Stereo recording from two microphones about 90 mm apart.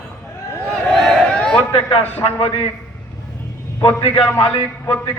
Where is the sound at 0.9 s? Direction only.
5° left (ahead or behind).